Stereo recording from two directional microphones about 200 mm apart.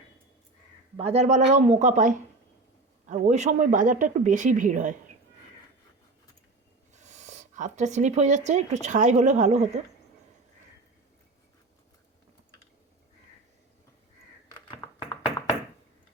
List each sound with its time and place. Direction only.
0.9 s speech: 30° right (ahead or behind)
6.9 s speech: 35° right (ahead or behind)
14.8 s tap: 20° left (ahead or behind)